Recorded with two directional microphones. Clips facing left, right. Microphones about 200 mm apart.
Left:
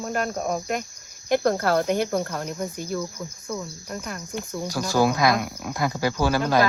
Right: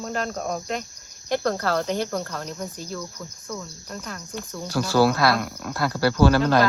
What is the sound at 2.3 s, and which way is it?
Speech, 10° left (ahead or behind).